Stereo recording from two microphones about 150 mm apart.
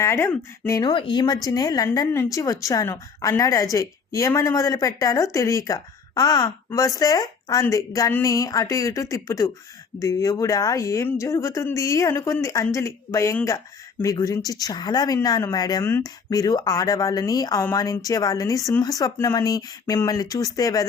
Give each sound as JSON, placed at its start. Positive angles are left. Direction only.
{"t": 0.0, "sound": "speech", "side_deg": 20}
{"t": 0.8, "sound": "a woman's voice", "side_deg": 35}
{"t": 15.8, "sound": "a woman's voice", "side_deg": 15}